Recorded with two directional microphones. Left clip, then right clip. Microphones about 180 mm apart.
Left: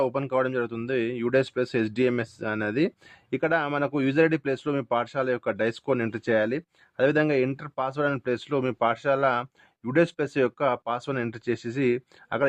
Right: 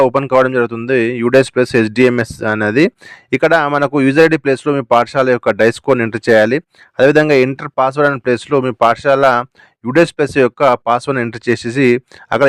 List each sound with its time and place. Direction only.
0.0 s speech: 35° right (ahead or behind)